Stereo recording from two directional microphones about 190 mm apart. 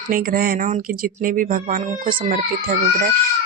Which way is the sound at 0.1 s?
50° right (ahead or behind).